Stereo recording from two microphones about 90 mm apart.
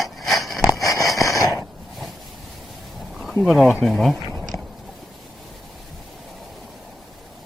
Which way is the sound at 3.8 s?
Centre (ahead or behind).